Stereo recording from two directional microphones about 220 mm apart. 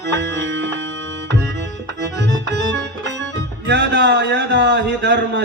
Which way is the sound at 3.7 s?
50° right (ahead or behind).